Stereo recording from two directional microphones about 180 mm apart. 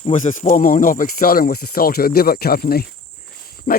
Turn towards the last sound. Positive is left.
turn(degrees=55)  # may be behind; listen again after turning